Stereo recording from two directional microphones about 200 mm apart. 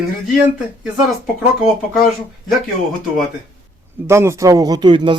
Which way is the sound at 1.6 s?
Centre (ahead or behind).